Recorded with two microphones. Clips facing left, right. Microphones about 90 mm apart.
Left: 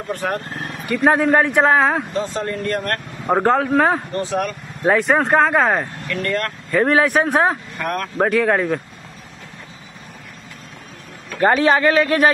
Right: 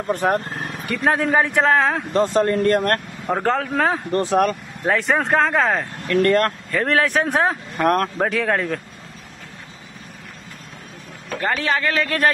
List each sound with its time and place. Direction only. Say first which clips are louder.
0.1 s speech: right 4 dB; 25° right (ahead or behind)
1.0 s a man's voice: left 3 dB; 5° left (ahead or behind)
2.1 s speech: right 6 dB; 55° right (ahead or behind)
2.4 s speech: right 5 dB; 40° right (ahead or behind)
3.4 s a man's voice: left 4 dB; 5° left (ahead or behind)
4.1 s speech: right 4 dB; 45° right (ahead or behind)
4.8 s a man's voice: left 3 dB; 5° left (ahead or behind)
6.0 s speech: right 11 dB; 40° right (ahead or behind)
6.7 s a man's voice: left 6 dB; 10° left (ahead or behind)
7.7 s speech: right 6 dB; 40° right (ahead or behind)
8.2 s a man's voice: left 4 dB; 5° left (ahead or behind)
11.4 s a man's voice: left 7 dB; 25° left (ahead or behind)